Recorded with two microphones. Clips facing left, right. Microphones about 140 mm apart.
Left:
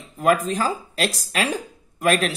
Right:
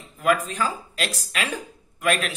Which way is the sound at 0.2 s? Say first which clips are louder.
Left 3 dB; 35° left (ahead or behind).